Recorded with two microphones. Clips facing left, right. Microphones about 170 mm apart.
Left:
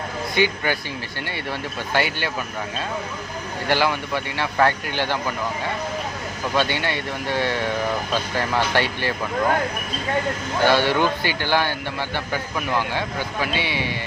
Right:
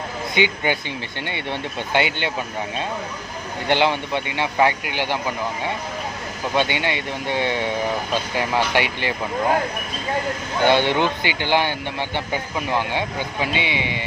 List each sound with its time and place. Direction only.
0.3 s speech: 20° right (ahead or behind)
3.7 s speech: 20° right (ahead or behind)
10.6 s speech: 20° right (ahead or behind)